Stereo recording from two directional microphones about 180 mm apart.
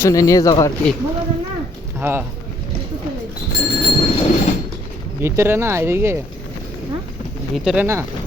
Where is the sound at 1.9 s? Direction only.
10° right (ahead or behind).